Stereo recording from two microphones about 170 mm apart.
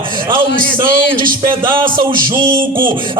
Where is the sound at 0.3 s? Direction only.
30° right (ahead or behind).